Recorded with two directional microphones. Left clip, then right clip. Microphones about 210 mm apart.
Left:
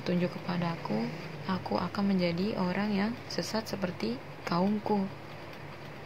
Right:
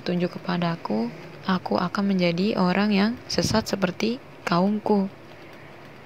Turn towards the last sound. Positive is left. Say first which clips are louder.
# right 7 dB
turn(degrees=-30)  # may be behind; listen again after turning